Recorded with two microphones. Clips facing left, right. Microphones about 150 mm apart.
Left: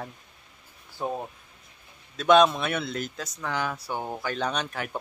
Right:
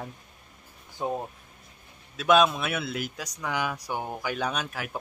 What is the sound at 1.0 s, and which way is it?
Speech, 15° right (ahead or behind).